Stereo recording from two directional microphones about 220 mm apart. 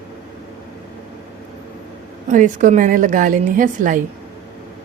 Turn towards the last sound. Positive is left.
turn(degrees=-35)  # may be behind; listen again after turning